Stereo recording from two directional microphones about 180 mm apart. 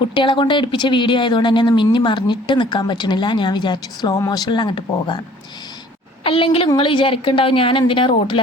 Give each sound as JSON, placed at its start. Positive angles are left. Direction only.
{"t": 0.1, "sound": "speech", "side_deg": 25}
{"t": 6.2, "sound": "speech", "side_deg": 30}